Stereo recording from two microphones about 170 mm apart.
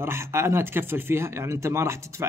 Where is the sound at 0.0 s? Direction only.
15° right (ahead or behind).